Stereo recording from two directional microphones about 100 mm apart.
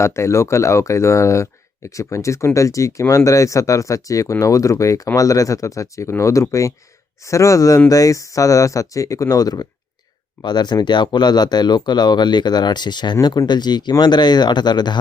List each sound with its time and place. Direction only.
0.0 s speech: 30° left (ahead or behind); by 14.9 s 45° left (ahead or behind)